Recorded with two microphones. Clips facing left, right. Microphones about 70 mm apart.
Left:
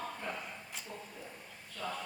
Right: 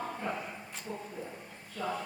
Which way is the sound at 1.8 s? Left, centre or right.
Right.